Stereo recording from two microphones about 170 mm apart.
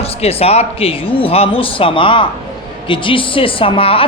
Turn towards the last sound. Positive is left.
turn(degrees=35)  # may be behind; listen again after turning